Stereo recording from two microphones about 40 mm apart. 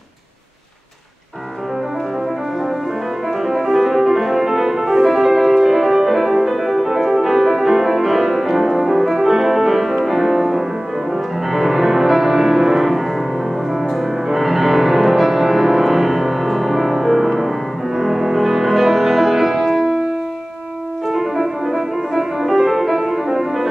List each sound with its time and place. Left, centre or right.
3.4 s music: centre
21.1 s music: centre